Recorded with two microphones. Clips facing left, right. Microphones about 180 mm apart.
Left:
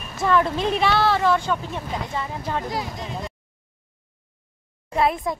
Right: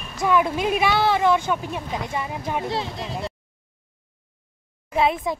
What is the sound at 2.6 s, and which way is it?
Speech, 30° right (ahead or behind).